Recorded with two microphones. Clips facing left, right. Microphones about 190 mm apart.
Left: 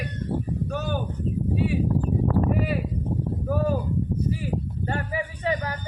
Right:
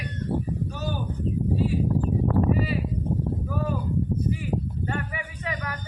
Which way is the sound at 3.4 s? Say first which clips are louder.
Left 4 dB; 40° left (ahead or behind).